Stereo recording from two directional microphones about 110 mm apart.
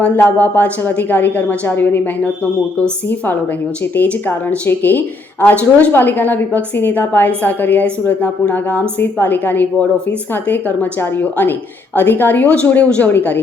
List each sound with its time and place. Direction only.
0.0 s a woman's voice: 10° left (ahead or behind)